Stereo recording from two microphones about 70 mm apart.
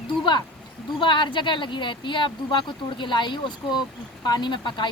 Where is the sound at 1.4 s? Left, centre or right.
Left.